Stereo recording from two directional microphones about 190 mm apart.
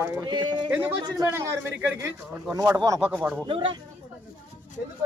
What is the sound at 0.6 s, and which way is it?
A man's voice, 10° right (ahead or behind).